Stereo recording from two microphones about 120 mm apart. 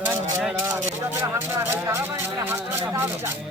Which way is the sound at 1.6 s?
25° right (ahead or behind).